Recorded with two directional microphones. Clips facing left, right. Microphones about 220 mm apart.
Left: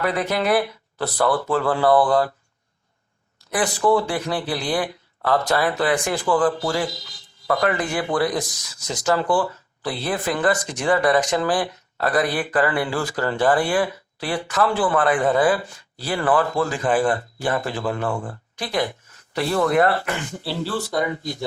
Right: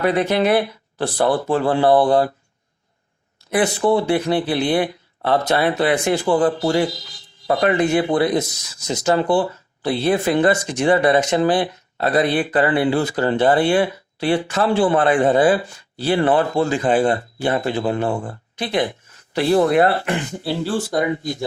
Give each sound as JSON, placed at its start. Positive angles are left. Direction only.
{"t": 0.0, "sound": "speech", "side_deg": -25}
{"t": 3.5, "sound": "speech", "side_deg": -25}